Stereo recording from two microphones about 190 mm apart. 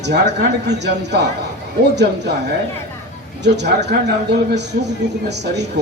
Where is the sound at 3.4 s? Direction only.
65° right (ahead or behind).